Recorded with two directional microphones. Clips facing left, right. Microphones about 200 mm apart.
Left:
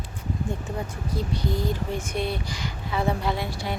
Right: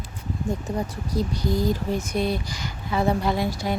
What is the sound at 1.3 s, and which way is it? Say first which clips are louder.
Speech: right 3 dB; 40° right (ahead or behind).